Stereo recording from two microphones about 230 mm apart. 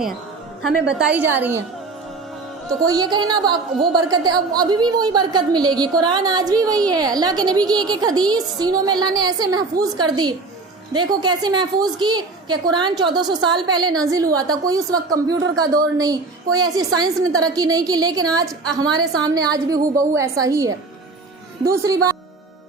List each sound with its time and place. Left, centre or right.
0.9 s a woman's voice: centre
2.8 s a woman's voice: centre